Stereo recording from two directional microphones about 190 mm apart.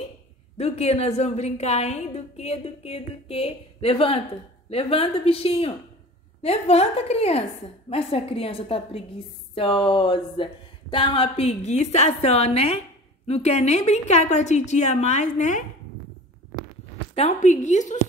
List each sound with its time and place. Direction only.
0.6 s a woman's voice: 35° left (ahead or behind)
17.3 s a woman's voice: 40° left (ahead or behind)